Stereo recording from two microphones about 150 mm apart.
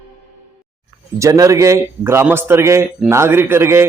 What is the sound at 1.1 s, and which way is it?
A man's voice, 20° right (ahead or behind).